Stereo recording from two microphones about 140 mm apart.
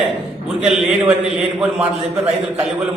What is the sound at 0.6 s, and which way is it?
Speech, 5° right (ahead or behind).